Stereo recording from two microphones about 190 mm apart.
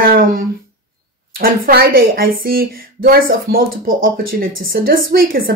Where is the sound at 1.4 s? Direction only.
50° right (ahead or behind).